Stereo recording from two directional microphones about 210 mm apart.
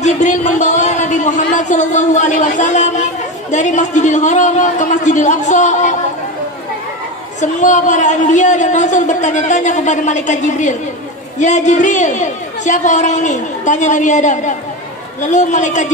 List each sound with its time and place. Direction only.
0.0 s a woman's voice: 35° left (ahead or behind)
7.3 s a woman's voice: 35° left (ahead or behind)